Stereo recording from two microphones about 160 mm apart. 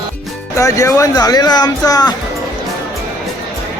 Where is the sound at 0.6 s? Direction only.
20° left (ahead or behind).